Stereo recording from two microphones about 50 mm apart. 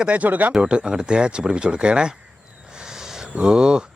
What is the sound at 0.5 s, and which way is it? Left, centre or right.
Speech, centre.